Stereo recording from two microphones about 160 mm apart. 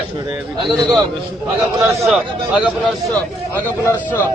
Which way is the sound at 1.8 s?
20° right (ahead or behind).